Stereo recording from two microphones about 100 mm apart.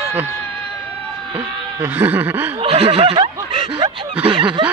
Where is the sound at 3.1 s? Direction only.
55° right (ahead or behind).